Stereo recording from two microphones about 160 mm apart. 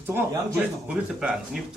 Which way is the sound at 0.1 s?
10° right (ahead or behind).